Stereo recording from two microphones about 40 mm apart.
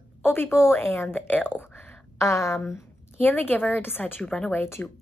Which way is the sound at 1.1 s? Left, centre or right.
Left.